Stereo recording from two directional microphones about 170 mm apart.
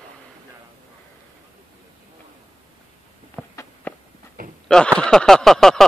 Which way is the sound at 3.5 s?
15° left (ahead or behind).